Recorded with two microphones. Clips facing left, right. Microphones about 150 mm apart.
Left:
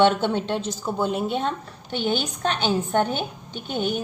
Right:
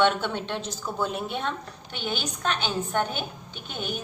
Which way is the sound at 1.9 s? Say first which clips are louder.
Left 7 dB; 40° left (ahead or behind).